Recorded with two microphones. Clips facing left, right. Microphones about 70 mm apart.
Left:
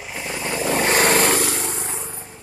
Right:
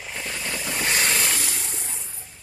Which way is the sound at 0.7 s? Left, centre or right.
Left.